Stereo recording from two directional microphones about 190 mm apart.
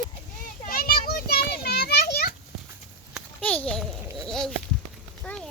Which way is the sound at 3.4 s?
10° left (ahead or behind).